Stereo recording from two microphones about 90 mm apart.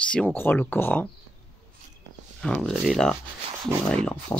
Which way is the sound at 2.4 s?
10° left (ahead or behind).